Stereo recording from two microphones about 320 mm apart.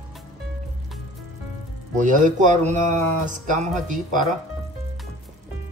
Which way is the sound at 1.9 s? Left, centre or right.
Right.